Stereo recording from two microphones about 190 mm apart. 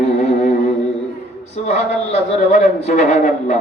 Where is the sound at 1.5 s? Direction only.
35° left (ahead or behind).